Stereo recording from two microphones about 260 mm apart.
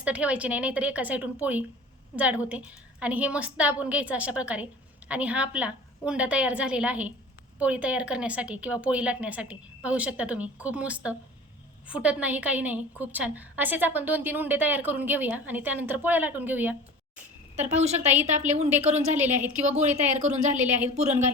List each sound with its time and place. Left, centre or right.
0.0 s a woman's voice: centre
17.7 s speech: right
18.0 s a woman's voice: centre
18.8 s speech: right
19.1 s a woman's voice: centre
19.6 s speech: right
20.5 s a woman's voice: centre
20.9 s speech: right